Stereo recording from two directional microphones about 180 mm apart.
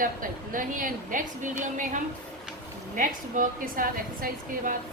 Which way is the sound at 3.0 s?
50° right (ahead or behind).